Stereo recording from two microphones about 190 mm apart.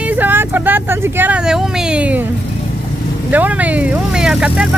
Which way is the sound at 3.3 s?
10° right (ahead or behind).